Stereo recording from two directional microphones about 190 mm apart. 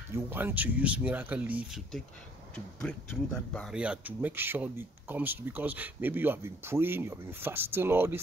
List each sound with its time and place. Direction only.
0.1 s speech: 10° right (ahead or behind)